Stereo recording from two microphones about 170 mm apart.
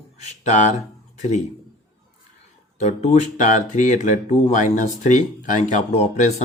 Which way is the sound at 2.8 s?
40° left (ahead or behind).